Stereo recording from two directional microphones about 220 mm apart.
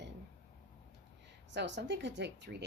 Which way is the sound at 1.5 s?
50° right (ahead or behind).